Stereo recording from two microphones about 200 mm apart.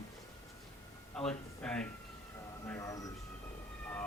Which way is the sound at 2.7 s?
15° left (ahead or behind).